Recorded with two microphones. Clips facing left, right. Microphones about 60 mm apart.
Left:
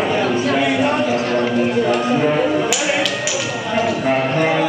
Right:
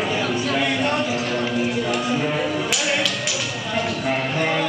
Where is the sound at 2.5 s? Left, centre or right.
Centre.